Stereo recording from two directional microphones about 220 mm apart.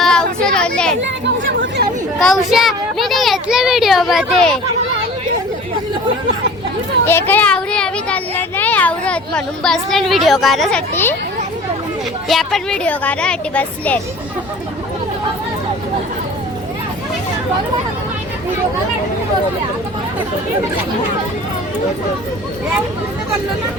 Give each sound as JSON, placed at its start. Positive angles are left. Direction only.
{"t": 0.0, "sound": "a sound", "side_deg": 5}
{"t": 1.0, "sound": "chatter", "side_deg": -55}
{"t": 2.1, "sound": "a child's voice", "side_deg": 0}
{"t": 7.0, "sound": "a child's voice", "side_deg": 10}
{"t": 12.3, "sound": "a child's voice", "side_deg": 0}